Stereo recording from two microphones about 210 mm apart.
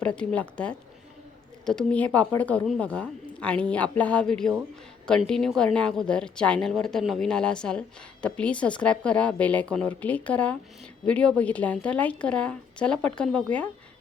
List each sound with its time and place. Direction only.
0.0 s speech: 5° left (ahead or behind)